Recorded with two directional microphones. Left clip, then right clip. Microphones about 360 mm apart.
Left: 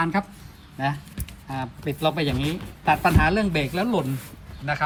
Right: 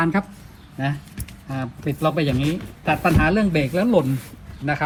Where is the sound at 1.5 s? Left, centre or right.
Right.